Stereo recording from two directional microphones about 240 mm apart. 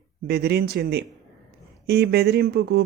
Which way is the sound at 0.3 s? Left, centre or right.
Right.